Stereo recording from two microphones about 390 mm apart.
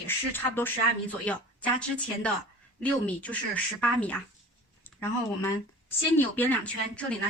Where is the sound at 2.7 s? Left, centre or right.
Centre.